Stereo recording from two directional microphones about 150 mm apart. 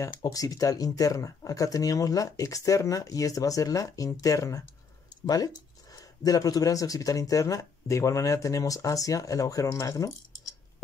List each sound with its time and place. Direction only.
0.0 s speech: 25° left (ahead or behind)